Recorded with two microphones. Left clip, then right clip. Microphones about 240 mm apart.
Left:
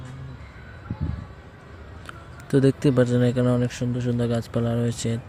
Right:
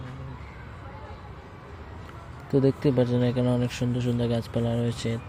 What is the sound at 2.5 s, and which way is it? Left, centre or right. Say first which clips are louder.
Speech: left 3 dB; left.